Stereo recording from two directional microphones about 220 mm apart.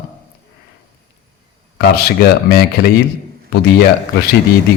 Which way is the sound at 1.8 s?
45° left (ahead or behind).